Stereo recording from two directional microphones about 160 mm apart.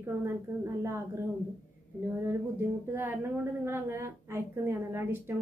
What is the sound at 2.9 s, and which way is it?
A woman's voice, 15° right (ahead or behind).